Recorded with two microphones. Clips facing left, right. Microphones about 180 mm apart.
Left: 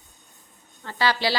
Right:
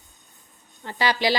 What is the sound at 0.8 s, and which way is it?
Speech, 15° right (ahead or behind).